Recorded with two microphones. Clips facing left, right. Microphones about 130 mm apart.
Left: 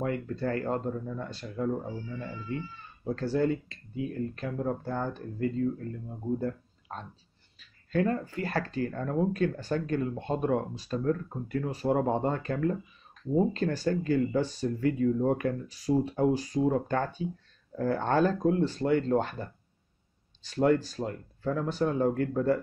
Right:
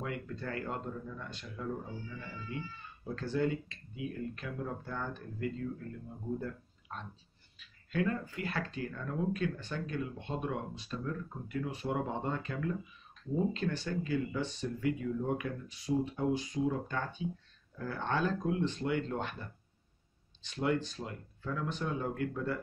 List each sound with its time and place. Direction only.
0.0 s speech: 40° left (ahead or behind)
6.4 s a sound: 35° left (ahead or behind)
7.6 s speech: 40° left (ahead or behind)